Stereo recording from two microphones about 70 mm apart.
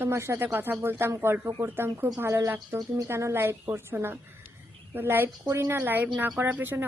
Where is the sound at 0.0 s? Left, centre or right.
Right.